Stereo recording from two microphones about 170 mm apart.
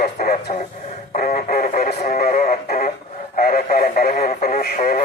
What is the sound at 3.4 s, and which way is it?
Speech, 60° left (ahead or behind).